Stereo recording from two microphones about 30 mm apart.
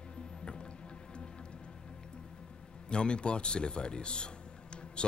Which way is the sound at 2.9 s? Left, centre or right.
Left.